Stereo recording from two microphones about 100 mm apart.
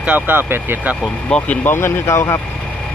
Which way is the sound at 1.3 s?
15° left (ahead or behind).